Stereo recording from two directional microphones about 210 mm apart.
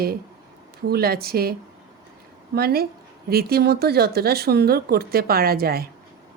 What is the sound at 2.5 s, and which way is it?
Speech, 45° right (ahead or behind).